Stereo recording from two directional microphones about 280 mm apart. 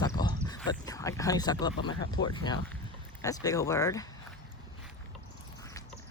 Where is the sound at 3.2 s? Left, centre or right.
Centre.